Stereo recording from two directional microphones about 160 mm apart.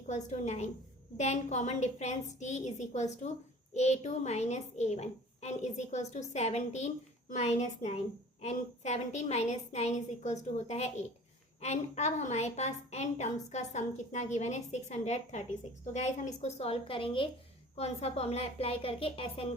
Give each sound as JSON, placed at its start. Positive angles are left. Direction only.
{"t": 0.1, "sound": "a woman's voice", "side_deg": 45}